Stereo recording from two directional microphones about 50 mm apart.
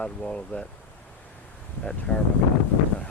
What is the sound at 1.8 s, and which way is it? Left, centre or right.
Speech, left.